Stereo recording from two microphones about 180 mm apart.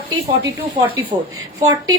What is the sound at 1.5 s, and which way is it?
Speech, 20° right (ahead or behind).